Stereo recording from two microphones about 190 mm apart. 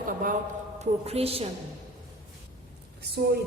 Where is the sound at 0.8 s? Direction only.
30° right (ahead or behind).